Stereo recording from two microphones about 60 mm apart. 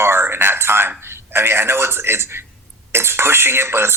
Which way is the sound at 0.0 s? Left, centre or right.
Right.